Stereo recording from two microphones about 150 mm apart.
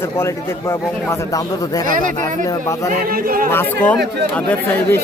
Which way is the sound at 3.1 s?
75° right (ahead or behind).